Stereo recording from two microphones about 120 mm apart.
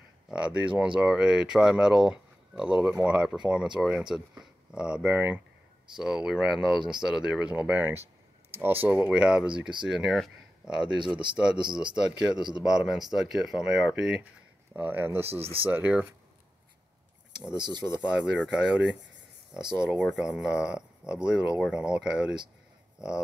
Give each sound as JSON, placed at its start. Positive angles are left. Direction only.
{"t": 0.3, "sound": "speech", "side_deg": -10}
{"t": 11.3, "sound": "speech", "side_deg": -40}
{"t": 11.7, "sound": "speech", "side_deg": -5}
{"t": 17.6, "sound": "speech", "side_deg": -35}
{"t": 18.0, "sound": "speech", "side_deg": -5}